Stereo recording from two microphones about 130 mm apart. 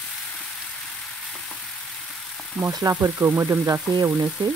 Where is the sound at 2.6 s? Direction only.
25° right (ahead or behind).